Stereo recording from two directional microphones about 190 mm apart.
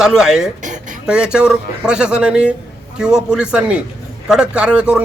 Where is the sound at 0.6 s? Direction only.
40° right (ahead or behind).